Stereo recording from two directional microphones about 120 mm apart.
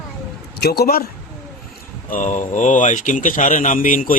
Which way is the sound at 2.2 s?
90° left.